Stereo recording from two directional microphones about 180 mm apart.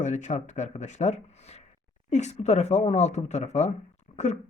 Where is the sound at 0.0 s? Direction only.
40° left (ahead or behind).